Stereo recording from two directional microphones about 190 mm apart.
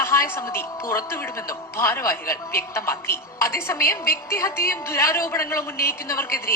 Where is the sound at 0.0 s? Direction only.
15° left (ahead or behind).